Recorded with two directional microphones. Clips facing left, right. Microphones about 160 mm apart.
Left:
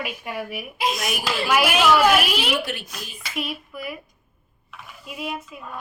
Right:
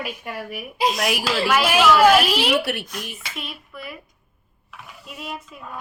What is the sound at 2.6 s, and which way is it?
Speech, 65° right (ahead or behind).